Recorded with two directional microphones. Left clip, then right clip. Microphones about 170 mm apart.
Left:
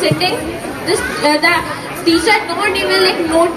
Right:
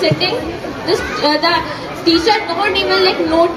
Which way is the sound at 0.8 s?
20° left (ahead or behind).